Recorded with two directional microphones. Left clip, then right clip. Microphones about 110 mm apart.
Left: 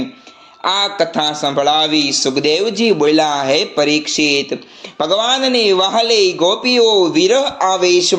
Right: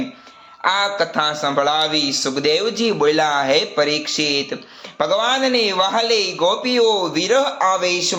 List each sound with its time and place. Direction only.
0.6 s a man's voice: 40° left (ahead or behind)